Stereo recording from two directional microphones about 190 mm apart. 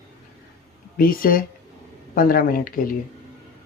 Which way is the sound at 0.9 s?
50° left (ahead or behind).